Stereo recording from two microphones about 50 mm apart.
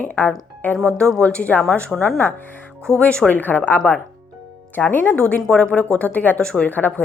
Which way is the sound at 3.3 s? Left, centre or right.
Left.